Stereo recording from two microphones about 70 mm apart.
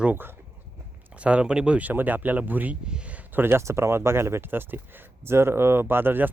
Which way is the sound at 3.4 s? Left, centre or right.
Right.